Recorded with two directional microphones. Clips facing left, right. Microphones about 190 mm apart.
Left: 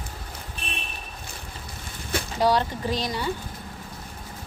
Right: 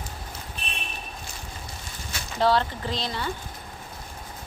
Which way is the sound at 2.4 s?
15° left (ahead or behind).